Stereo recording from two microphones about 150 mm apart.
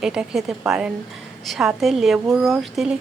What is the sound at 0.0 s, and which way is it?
A woman's voice, 5° right (ahead or behind).